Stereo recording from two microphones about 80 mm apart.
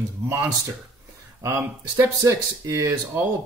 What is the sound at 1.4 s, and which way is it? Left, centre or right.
Speech, right.